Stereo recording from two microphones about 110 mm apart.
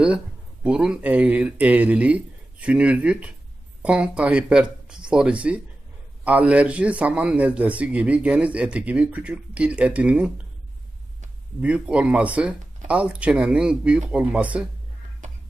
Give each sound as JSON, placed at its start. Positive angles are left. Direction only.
{"t": 0.7, "sound": "a man's voice", "side_deg": -10}
{"t": 11.6, "sound": "a man's voice", "side_deg": -10}